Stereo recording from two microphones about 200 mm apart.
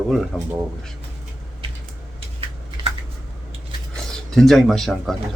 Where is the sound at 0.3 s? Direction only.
Centre (ahead or behind).